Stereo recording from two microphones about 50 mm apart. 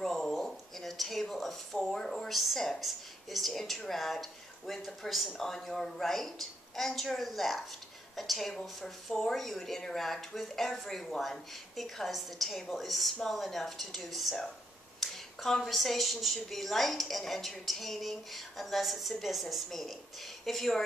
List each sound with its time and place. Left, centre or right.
0.0 s a woman's voice: centre
15.0 s a sound: centre
15.6 s a woman's voice: centre